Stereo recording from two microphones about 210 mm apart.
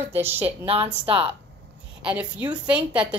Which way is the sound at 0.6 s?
25° right (ahead or behind).